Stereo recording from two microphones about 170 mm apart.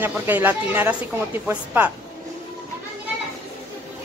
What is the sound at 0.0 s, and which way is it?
Speech, 10° right (ahead or behind).